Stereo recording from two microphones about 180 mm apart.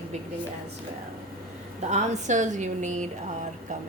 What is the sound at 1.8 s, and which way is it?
A woman's voice, 40° right (ahead or behind).